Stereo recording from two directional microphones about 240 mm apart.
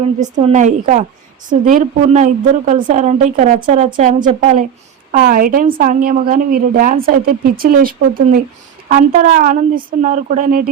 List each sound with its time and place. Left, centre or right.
0.0 s a woman's voice: right